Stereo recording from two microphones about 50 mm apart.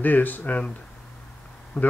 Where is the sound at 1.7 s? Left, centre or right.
Centre.